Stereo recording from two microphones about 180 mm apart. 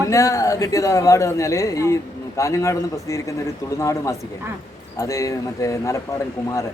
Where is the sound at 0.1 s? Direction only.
20° left (ahead or behind).